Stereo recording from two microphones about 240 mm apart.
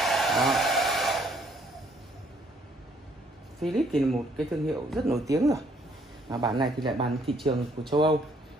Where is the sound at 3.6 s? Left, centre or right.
Centre.